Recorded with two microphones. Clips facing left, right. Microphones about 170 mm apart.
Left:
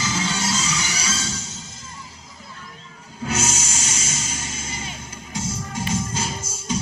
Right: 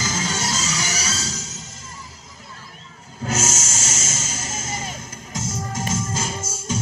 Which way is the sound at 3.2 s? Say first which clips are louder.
Even; 40° right (ahead or behind).